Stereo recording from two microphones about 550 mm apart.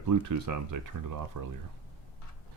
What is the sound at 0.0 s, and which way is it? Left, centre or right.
Speech, right.